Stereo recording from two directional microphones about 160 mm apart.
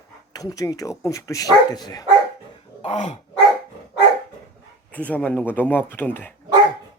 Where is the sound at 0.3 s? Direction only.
20° left (ahead or behind).